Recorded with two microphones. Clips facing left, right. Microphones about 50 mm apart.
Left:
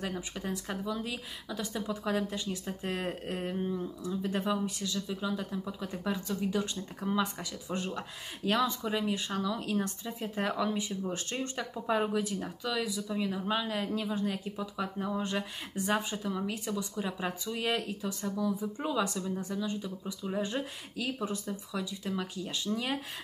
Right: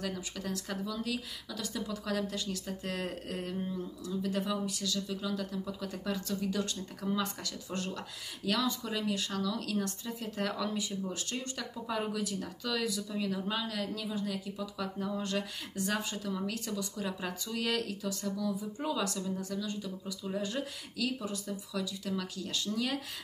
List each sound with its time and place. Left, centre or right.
0.0 s speech: left
8.5 s speech: left
12.7 s speech: centre